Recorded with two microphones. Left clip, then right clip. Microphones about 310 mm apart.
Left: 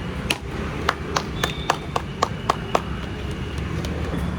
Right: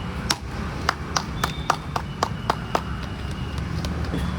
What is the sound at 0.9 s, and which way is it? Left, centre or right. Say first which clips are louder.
Horse: left 1 dB; right.